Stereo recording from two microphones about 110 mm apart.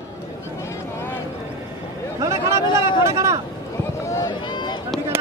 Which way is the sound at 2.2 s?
25° right (ahead or behind).